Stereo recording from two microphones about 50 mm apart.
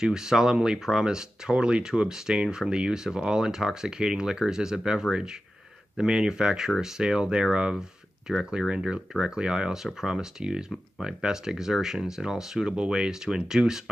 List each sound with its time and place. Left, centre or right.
0.0 s speech: centre